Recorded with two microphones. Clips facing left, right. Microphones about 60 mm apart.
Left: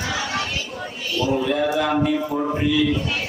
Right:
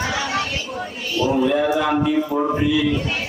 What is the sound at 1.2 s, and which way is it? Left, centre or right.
Speech, centre.